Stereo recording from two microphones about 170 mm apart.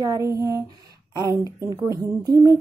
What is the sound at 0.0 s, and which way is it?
A woman's voice, 20° right (ahead or behind).